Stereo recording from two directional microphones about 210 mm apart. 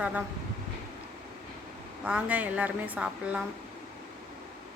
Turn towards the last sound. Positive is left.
turn(degrees=-5)  # may be behind; listen again after turning